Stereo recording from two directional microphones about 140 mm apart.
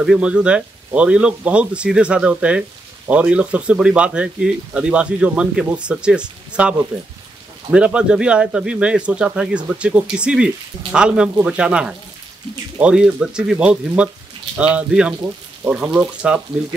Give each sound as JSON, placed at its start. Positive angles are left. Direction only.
{"t": 0.0, "sound": "speech", "side_deg": -5}